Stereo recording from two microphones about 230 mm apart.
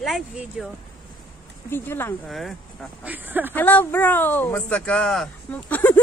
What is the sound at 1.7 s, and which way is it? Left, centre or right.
Speech, centre.